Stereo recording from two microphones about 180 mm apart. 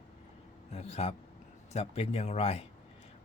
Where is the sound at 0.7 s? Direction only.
35° left (ahead or behind).